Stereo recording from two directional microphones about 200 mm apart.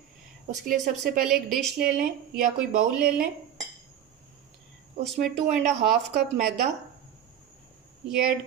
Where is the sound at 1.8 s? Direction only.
45° right (ahead or behind).